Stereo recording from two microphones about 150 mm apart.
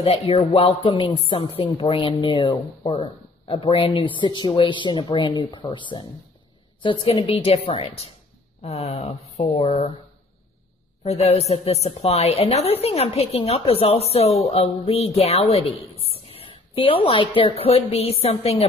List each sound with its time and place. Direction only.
0.3 s a woman's voice: 35° left (ahead or behind)
11.1 s a woman's voice: 45° left (ahead or behind)